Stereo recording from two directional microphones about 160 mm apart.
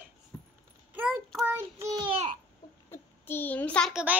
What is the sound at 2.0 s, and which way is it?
Babbling, 35° right (ahead or behind).